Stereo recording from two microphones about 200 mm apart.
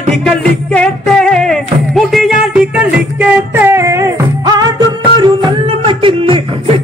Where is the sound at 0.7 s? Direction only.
5° left (ahead or behind).